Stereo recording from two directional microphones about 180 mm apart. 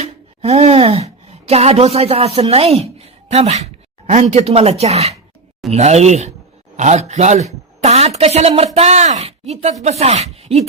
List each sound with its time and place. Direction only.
0.0 s speech: 35° right (ahead or behind)